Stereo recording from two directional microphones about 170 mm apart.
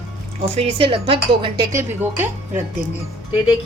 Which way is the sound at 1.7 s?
15° right (ahead or behind).